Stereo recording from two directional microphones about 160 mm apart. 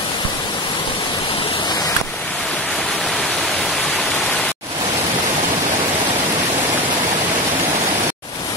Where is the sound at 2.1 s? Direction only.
5° left (ahead or behind).